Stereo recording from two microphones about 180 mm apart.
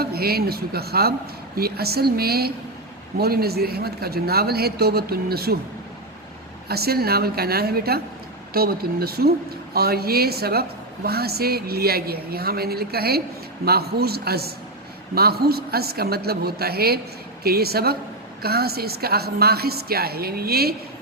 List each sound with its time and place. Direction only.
0.0 s a woman's voice: 60° right (ahead or behind)
6.7 s a woman's voice: 60° right (ahead or behind)